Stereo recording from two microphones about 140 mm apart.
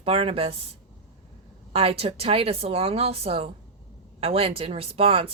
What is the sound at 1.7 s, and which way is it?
Speech, 45° right (ahead or behind).